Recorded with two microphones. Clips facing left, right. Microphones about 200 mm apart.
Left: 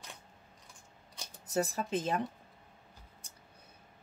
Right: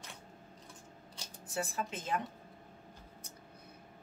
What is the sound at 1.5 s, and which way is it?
Speech, 40° left (ahead or behind).